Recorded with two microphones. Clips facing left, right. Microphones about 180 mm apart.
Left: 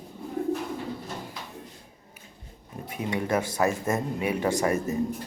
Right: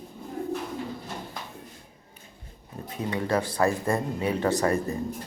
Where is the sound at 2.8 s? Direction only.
15° left (ahead or behind).